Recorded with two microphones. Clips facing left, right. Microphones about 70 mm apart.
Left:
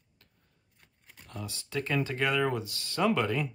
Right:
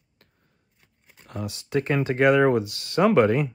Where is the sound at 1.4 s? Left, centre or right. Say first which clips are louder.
Right 9 dB; right.